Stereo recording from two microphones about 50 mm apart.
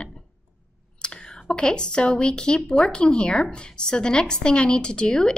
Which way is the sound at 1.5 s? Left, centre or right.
Centre.